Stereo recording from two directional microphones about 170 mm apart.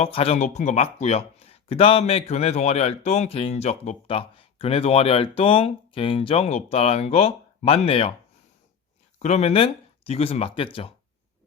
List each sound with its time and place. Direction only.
0.0 s speech: 35° left (ahead or behind)
9.1 s speech: 40° left (ahead or behind)